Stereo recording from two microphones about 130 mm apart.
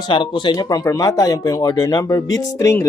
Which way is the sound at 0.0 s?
35° left (ahead or behind).